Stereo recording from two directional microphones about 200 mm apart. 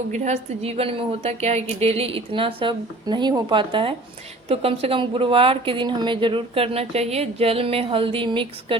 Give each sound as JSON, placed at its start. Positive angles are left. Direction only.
{"t": 0.1, "sound": "a woman's voice", "side_deg": -35}